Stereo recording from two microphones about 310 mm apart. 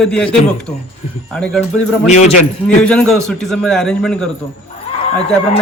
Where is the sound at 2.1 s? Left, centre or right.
Left.